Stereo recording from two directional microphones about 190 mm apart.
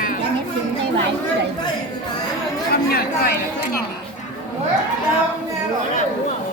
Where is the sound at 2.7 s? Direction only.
55° left (ahead or behind).